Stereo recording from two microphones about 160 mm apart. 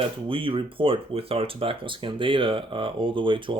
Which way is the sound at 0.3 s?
35° right (ahead or behind).